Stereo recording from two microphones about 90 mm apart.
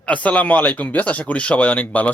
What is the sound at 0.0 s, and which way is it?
Speech, 15° left (ahead or behind).